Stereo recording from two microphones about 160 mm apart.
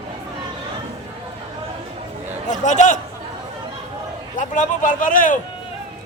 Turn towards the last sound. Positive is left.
turn(degrees=55)  # may be behind; listen again after turning